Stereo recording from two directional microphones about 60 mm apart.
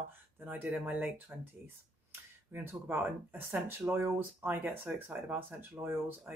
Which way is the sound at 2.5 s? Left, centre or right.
Right.